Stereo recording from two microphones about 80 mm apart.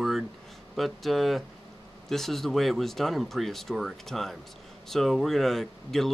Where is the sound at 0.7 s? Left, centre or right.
Centre.